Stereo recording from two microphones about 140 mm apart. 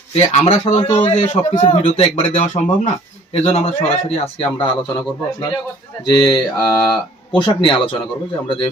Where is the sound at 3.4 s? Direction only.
50° left (ahead or behind).